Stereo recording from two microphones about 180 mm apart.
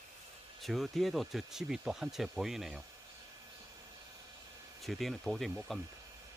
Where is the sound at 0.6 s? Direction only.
Centre (ahead or behind).